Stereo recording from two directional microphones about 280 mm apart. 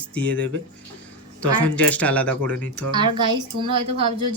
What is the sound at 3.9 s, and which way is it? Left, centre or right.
Speech, right.